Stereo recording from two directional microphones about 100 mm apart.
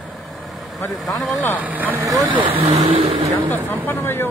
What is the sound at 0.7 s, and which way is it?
Speech, centre (ahead or behind).